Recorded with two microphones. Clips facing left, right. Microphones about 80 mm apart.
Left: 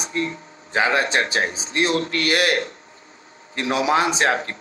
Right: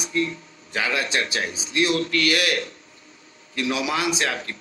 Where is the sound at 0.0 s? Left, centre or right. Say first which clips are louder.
Even; left.